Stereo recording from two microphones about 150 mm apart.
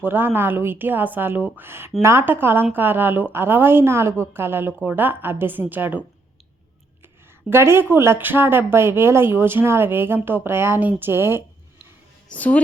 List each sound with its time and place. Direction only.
0.0 s speech: 15° right (ahead or behind)
7.5 s speech: 15° right (ahead or behind)
12.3 s a woman's voice: 10° left (ahead or behind)